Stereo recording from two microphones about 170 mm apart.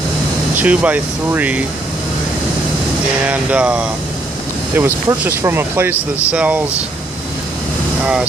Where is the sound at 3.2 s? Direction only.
10° right (ahead or behind).